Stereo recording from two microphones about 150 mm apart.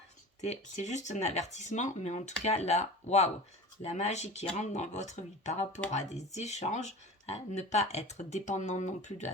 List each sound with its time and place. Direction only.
0.4 s speech: 50° left (ahead or behind)